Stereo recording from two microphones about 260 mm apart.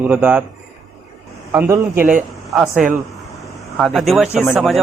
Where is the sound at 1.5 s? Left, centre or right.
Centre.